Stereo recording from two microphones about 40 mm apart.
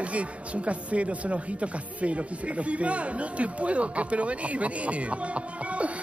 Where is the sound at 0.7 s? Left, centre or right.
Right.